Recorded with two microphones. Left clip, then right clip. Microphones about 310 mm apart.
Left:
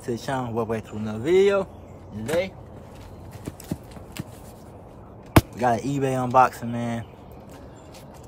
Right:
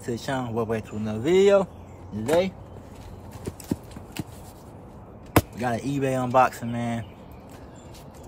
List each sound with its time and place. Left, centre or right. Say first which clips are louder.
0.0 s speech: left 1 dB; centre
5.3 s speech: left 4 dB; centre